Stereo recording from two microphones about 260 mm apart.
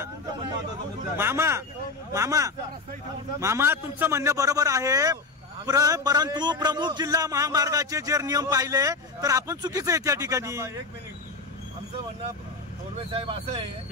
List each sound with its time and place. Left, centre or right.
1.1 s a man's voice: centre
12.9 s speech: right